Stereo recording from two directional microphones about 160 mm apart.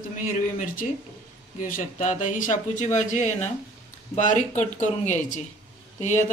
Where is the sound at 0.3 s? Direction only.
60° left (ahead or behind).